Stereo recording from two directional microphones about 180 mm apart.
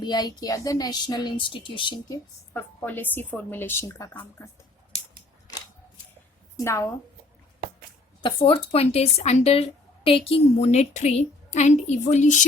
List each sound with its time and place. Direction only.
0.0 s a woman's voice: 25° left (ahead or behind)
2.5 s a woman's voice: 10° left (ahead or behind)
6.6 s a woman's voice: 15° left (ahead or behind)
8.2 s speech: 30° left (ahead or behind)